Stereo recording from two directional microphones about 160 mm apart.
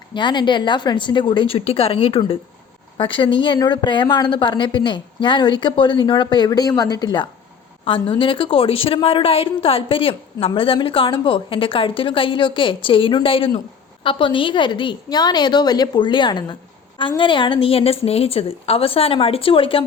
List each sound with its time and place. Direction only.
0.1 s a woman's voice: 30° left (ahead or behind)